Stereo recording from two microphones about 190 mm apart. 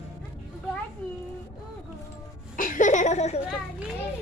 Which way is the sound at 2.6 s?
45° left (ahead or behind).